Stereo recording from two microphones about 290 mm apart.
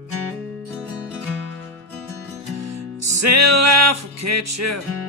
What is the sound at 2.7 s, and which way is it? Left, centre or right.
Music, right.